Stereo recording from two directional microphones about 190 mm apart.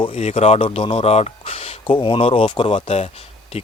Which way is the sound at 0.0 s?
35° left (ahead or behind).